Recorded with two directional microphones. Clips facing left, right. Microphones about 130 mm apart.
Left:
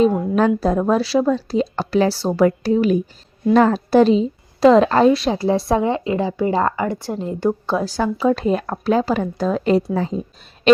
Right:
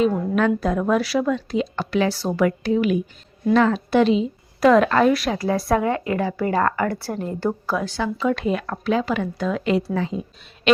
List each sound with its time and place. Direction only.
0.1 s a woman's voice: 30° left (ahead or behind); by 7.8 s 15° left (ahead or behind)
7.8 s a woman's voice: 40° left (ahead or behind)